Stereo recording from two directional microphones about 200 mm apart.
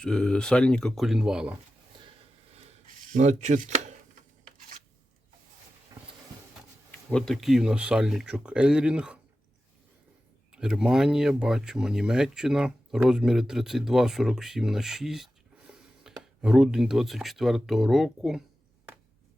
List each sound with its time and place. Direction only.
0.0 s speech: 5° left (ahead or behind)
2.6 s a sound: 40° right (ahead or behind)
6.9 s speech: 5° left (ahead or behind)
10.5 s speech: 5° right (ahead or behind)